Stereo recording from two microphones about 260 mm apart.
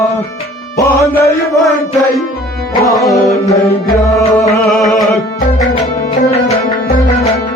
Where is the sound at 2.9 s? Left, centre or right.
Centre.